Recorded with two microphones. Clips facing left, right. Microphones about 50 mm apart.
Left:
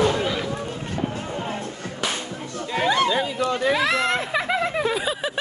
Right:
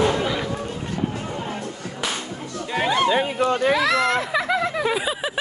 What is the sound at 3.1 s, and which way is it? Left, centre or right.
Speech, right.